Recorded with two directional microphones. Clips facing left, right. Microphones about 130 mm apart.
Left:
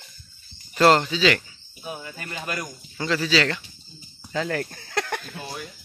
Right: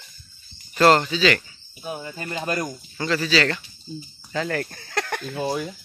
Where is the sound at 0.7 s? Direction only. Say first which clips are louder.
Right 1 dB; 5° left (ahead or behind).